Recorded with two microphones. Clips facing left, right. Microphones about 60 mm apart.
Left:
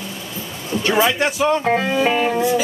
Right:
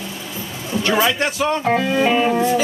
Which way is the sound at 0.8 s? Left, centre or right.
Centre.